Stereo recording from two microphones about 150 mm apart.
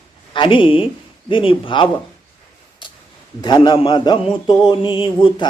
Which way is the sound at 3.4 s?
30° left (ahead or behind).